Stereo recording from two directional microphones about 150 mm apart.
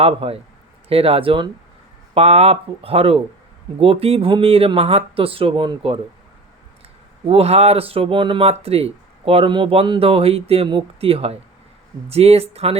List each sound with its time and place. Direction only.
0.0 s speech: 40° right (ahead or behind)
7.3 s speech: 40° right (ahead or behind)